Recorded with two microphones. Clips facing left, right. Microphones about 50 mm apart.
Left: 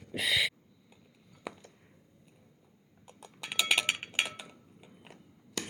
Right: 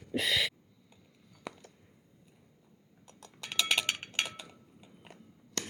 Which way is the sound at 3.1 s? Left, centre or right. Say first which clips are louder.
Left 2 dB; centre.